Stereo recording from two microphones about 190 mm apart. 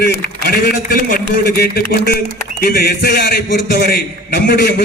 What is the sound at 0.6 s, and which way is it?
A man's voice, 55° left (ahead or behind).